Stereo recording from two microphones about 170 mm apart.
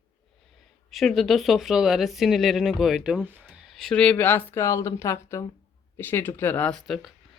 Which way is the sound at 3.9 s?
5° left (ahead or behind).